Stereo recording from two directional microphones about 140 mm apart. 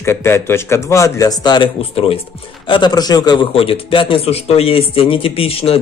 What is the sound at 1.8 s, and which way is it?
Speech, 45° left (ahead or behind).